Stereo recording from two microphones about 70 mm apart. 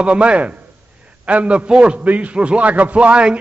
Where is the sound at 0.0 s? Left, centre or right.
Centre.